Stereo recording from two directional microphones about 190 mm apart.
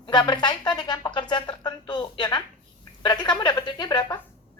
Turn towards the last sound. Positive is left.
turn(degrees=25)  # may be behind; listen again after turning